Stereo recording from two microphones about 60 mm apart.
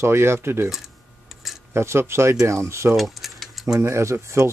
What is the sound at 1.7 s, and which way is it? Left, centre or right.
Speech, right.